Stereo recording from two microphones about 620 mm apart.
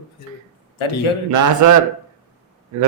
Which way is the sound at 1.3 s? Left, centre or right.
Right.